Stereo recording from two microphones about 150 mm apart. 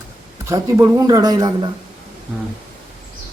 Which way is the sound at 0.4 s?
20° right (ahead or behind).